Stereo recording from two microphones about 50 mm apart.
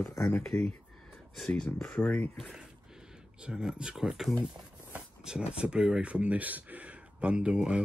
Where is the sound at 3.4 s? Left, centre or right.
Centre.